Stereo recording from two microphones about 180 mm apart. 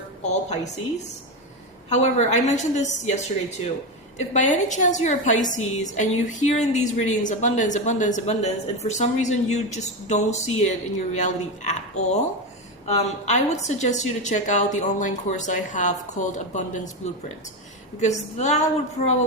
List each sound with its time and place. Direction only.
1.9 s a woman's voice: 40° left (ahead or behind)